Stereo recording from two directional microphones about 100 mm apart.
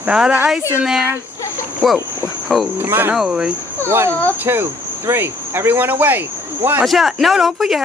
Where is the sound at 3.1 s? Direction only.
5° right (ahead or behind).